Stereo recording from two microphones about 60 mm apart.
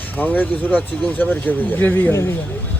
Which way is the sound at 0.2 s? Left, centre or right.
Left.